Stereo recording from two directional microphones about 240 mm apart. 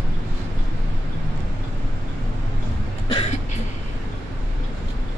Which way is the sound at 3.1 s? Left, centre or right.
Left.